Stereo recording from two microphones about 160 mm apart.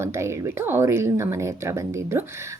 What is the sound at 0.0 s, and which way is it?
A woman's voice, 15° right (ahead or behind).